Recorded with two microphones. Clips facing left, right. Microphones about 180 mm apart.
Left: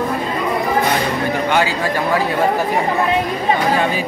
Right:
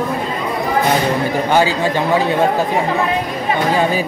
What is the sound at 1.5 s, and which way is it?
Speech, 35° right (ahead or behind).